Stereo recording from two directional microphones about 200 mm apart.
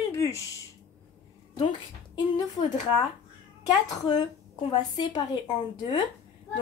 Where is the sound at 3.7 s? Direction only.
20° left (ahead or behind).